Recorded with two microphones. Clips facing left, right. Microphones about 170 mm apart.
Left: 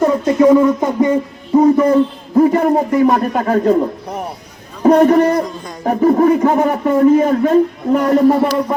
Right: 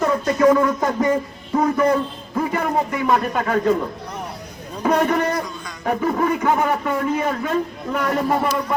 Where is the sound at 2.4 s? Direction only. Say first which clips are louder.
Left 9 dB; 40° left (ahead or behind).